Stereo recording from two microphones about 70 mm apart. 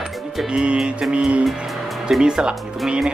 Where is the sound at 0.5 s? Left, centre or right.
Centre.